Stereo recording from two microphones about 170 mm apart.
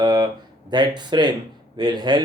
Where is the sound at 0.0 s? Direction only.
20° right (ahead or behind).